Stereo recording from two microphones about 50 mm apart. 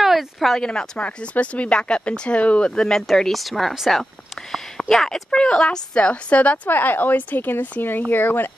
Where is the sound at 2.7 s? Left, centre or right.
Centre.